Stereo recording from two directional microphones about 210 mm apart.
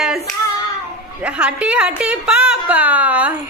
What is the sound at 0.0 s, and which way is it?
Hands, centre (ahead or behind).